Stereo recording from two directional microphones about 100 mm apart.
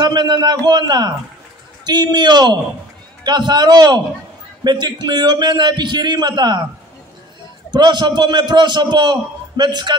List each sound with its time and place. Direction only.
0.0 s a man's voice: 45° right (ahead or behind)
7.7 s a man's voice: 45° right (ahead or behind)